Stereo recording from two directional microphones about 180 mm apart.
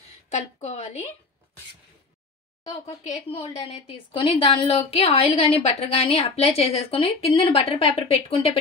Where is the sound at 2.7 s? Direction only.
35° left (ahead or behind).